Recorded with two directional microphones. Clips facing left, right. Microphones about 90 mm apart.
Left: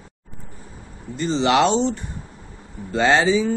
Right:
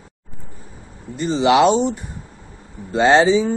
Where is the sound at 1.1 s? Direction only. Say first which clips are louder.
Right 3 dB; 20° right (ahead or behind).